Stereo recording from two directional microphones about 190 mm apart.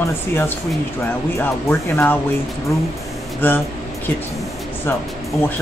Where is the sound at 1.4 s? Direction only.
10° left (ahead or behind).